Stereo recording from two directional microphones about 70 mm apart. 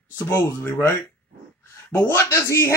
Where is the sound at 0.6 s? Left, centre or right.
Left.